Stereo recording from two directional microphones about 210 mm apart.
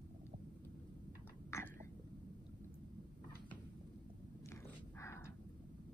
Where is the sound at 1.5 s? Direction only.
15° left (ahead or behind).